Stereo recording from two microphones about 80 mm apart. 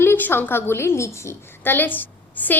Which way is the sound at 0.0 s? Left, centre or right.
Left.